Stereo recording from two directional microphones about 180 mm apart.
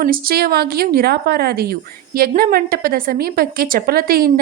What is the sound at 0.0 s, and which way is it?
A woman's voice, 55° right (ahead or behind).